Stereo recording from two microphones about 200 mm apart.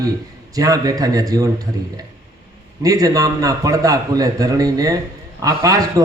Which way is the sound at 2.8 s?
20° right (ahead or behind).